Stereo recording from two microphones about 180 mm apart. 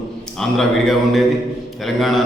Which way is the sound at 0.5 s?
Centre (ahead or behind).